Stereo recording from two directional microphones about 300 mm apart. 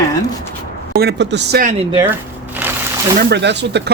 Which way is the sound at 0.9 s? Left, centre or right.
Right.